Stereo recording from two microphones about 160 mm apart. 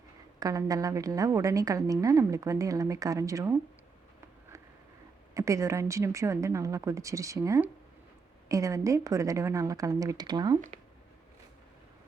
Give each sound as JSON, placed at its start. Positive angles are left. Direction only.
{"t": 0.3, "sound": "a woman's voice", "side_deg": -20}
{"t": 5.3, "sound": "a woman's voice", "side_deg": -20}